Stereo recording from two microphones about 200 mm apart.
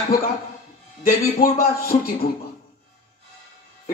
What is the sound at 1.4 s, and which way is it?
Speech, 50° left (ahead or behind).